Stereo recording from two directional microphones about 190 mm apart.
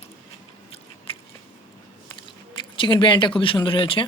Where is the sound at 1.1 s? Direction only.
30° left (ahead or behind).